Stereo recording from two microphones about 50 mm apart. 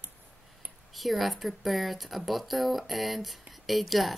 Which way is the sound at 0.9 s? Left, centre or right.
Centre.